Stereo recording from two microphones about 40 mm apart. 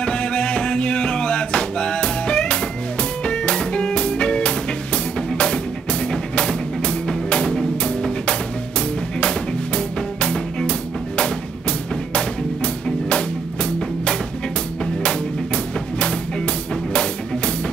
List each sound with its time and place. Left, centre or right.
0.0 s music: left
12.8 s music: left
15.0 s drum kit: left